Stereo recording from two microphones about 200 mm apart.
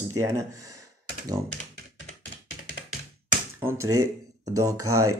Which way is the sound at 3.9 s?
90° right.